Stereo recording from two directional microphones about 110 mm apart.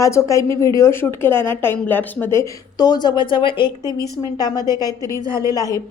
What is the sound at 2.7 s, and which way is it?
Speech, 35° left (ahead or behind).